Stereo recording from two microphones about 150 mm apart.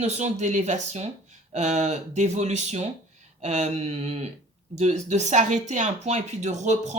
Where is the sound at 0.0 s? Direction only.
50° right (ahead or behind).